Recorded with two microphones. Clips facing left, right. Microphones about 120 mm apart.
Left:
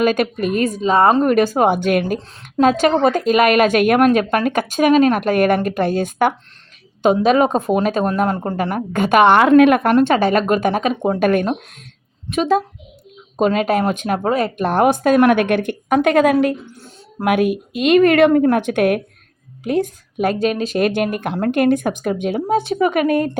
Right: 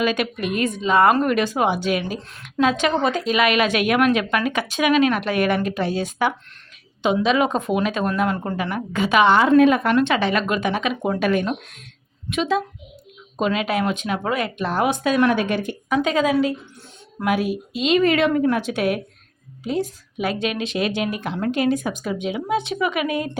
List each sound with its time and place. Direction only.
0.0 s a woman's voice: 45° left (ahead or behind); by 9.9 s 60° left (ahead or behind)
9.9 s a woman's voice: 40° left (ahead or behind)
14.7 s a woman's voice: 50° left (ahead or behind)